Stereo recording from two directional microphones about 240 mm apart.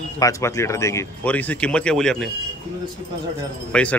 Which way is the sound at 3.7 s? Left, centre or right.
Centre.